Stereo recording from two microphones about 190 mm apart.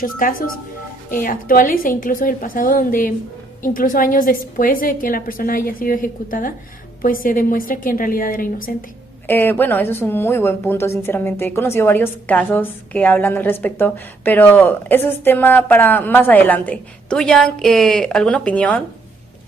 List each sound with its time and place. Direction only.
0.0 s a woman's voice: 45° left (ahead or behind)
9.2 s a woman's voice: 10° left (ahead or behind)